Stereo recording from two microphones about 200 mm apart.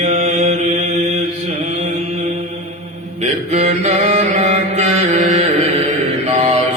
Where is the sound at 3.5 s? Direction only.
35° right (ahead or behind).